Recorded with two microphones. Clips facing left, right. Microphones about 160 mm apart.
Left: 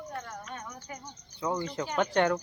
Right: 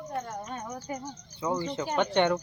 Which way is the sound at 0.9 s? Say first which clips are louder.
Right 10 dB; 30° right (ahead or behind).